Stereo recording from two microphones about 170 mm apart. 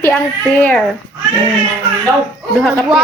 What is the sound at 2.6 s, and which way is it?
Speech, 5° left (ahead or behind).